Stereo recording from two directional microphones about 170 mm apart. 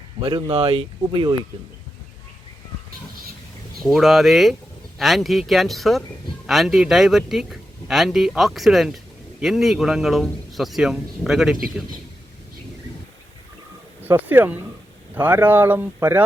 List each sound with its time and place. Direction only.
0.2 s speech: 30° right (ahead or behind)
3.8 s speech: centre (ahead or behind)
14.0 s speech: 10° right (ahead or behind)